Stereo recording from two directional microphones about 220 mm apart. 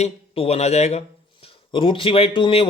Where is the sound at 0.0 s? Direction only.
30° left (ahead or behind).